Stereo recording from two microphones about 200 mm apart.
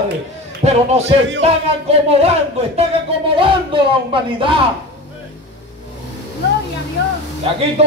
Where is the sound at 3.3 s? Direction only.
25° right (ahead or behind).